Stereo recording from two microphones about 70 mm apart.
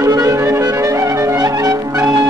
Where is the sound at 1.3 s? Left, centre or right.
Right.